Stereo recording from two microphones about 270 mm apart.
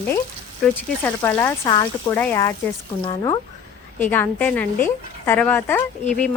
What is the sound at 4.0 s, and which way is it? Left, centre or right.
Speech, centre.